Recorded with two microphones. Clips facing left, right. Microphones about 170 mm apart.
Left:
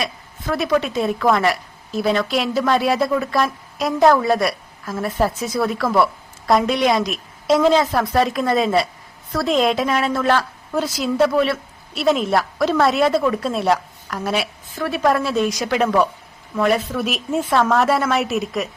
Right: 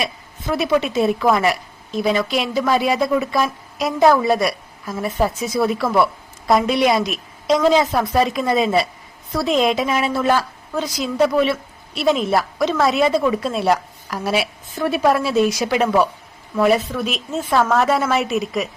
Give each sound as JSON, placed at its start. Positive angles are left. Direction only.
{"t": 0.0, "sound": "a woman's voice", "side_deg": -5}
{"t": 10.8, "sound": "a woman's voice", "side_deg": 5}